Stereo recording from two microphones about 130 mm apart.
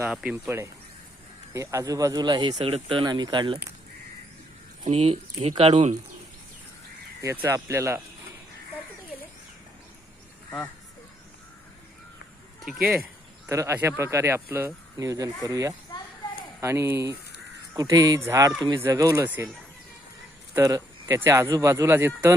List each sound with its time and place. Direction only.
0.0 s speech: 5° right (ahead or behind)
0.4 s speech: 20° right (ahead or behind); by 2.6 s 35° right (ahead or behind)
2.6 s speech: 50° right (ahead or behind)
4.9 s speech: 50° right (ahead or behind)
7.2 s speech: 25° right (ahead or behind)
12.6 s speech: 10° right (ahead or behind)
13.5 s speech: 20° right (ahead or behind)
15.9 s a sound: 30° left (ahead or behind)
16.6 s speech: 20° right (ahead or behind)
20.6 s speech: 25° right (ahead or behind)